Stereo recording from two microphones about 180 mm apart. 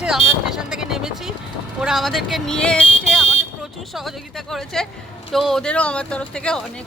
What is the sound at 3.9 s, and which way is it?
Speech, centre (ahead or behind).